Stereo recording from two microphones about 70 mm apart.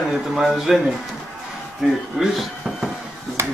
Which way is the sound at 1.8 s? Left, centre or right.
Centre.